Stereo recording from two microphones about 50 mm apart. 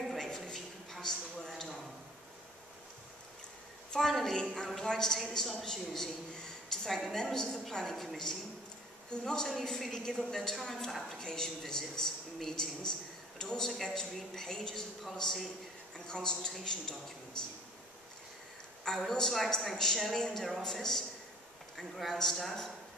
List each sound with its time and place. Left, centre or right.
0.1 s a sound: centre
3.9 s a woman's voice: centre
18.9 s a woman's voice: centre